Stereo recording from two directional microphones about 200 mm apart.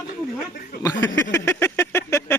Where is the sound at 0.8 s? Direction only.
15° left (ahead or behind).